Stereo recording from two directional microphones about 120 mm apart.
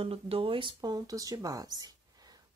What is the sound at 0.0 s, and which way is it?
Speech, 50° right (ahead or behind).